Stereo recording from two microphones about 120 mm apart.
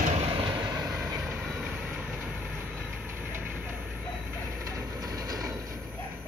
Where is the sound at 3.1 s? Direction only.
20° right (ahead or behind).